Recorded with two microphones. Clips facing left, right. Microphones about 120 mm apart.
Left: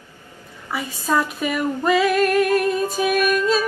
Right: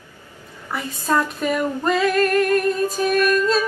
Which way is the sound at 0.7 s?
5° left (ahead or behind).